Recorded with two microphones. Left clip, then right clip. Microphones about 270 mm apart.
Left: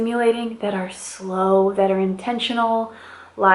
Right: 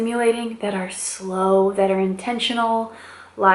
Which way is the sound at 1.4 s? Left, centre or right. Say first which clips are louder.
Even; centre.